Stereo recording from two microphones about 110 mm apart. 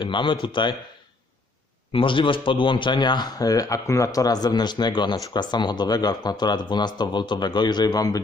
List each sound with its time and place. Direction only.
0.0 s a man's voice: 45° left (ahead or behind)
1.9 s speech: 50° left (ahead or behind); by 8.2 s 35° left (ahead or behind)